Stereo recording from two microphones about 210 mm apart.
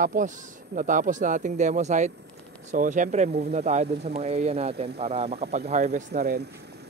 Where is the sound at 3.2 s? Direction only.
50° right (ahead or behind).